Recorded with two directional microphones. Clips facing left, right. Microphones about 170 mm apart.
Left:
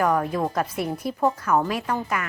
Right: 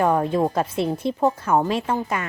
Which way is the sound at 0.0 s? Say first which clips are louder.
Right 3 dB; 25° right (ahead or behind).